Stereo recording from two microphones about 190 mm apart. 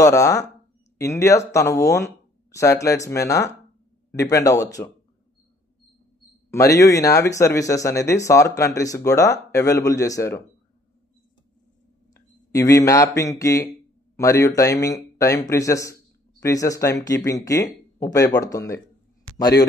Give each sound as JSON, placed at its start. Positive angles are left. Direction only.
{"t": 0.0, "sound": "speech", "side_deg": 15}
{"t": 6.5, "sound": "speech", "side_deg": 15}
{"t": 12.5, "sound": "speech", "side_deg": 15}